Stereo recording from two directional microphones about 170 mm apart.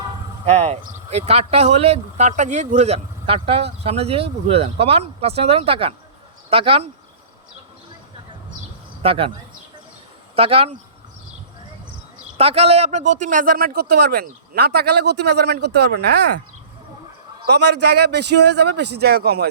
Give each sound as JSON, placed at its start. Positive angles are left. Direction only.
{"t": 0.4, "sound": "speech", "side_deg": -40}
{"t": 9.0, "sound": "speech", "side_deg": -35}
{"t": 10.3, "sound": "speech", "side_deg": -35}
{"t": 12.4, "sound": "a man's voice", "side_deg": -35}
{"t": 17.4, "sound": "a man's voice", "side_deg": -80}